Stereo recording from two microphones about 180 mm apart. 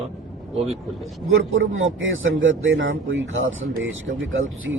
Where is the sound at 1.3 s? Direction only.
90° right.